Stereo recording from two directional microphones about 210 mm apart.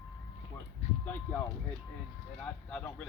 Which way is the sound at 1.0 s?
10° left (ahead or behind).